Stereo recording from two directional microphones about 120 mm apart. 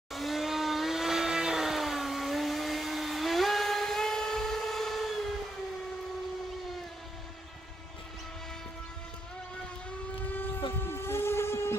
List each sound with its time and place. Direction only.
0.1 s vehicle: centre (ahead or behind)
10.8 s steam whistle: 20° left (ahead or behind)